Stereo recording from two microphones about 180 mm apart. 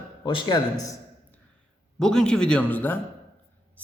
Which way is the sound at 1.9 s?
5° left (ahead or behind).